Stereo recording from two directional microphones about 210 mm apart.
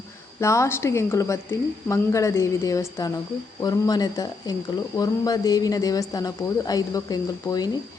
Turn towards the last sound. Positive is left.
turn(degrees=20)  # may be behind; listen again after turning